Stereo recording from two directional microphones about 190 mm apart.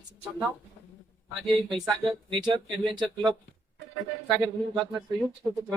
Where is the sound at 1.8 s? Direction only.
25° right (ahead or behind).